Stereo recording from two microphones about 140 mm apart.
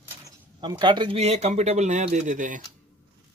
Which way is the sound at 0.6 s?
35° right (ahead or behind).